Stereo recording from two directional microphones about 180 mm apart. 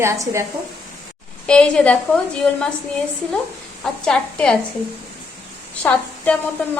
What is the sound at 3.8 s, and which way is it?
Speech, 5° left (ahead or behind).